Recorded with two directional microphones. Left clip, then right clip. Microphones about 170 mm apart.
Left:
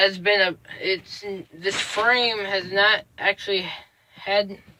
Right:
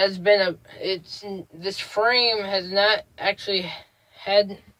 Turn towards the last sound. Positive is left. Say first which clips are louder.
# left 1 dB
turn(degrees=-20)  # may be behind; listen again after turning